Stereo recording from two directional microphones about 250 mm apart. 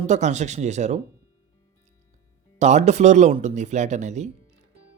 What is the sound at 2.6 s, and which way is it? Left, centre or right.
Speech, right.